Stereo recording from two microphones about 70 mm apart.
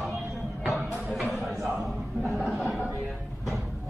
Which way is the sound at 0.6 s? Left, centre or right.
Centre.